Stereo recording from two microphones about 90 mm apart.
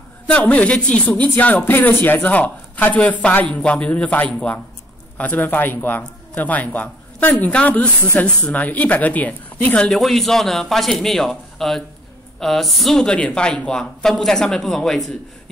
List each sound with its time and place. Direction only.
0.3 s a man's voice: 15° left (ahead or behind)
9.8 s speech: 5° left (ahead or behind)